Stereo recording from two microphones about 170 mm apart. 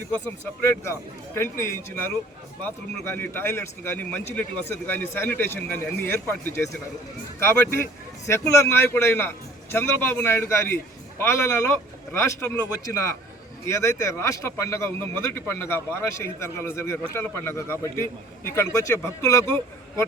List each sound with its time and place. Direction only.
0.1 s speech: 15° left (ahead or behind)
8.3 s speech: 15° left (ahead or behind)
13.7 s speech: 15° left (ahead or behind)